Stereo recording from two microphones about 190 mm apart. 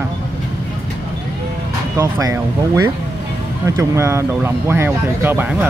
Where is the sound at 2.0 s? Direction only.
15° right (ahead or behind).